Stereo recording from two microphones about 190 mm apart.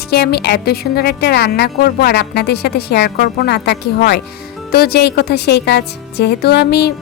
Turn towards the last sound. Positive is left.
turn(degrees=60)  # may be behind; listen again after turning